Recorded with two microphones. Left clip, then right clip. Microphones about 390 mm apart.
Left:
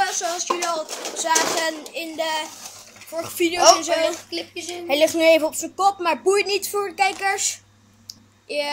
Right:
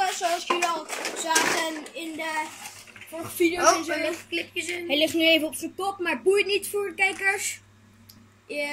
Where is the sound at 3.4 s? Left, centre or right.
Centre.